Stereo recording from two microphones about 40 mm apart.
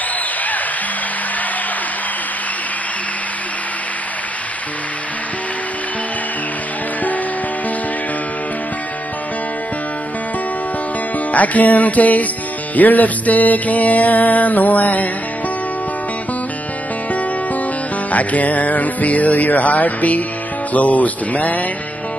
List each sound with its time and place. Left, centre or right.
11.3 s music: left
18.1 s music: left